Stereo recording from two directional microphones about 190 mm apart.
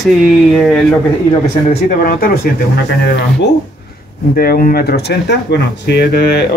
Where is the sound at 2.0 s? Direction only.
50° left (ahead or behind).